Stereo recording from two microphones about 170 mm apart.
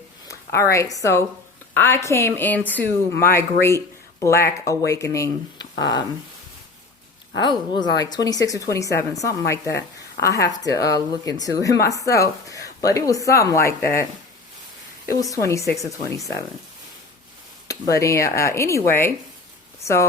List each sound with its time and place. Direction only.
0.3 s a woman's voice: 15° left (ahead or behind)
7.3 s a woman's voice: 25° left (ahead or behind)
15.0 s a woman's voice: 20° left (ahead or behind)
17.7 s speech: 20° left (ahead or behind)